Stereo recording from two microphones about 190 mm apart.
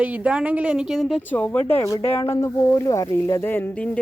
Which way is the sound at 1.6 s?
20° left (ahead or behind).